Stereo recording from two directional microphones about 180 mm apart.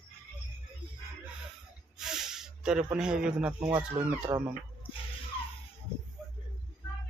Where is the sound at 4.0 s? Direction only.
10° right (ahead or behind).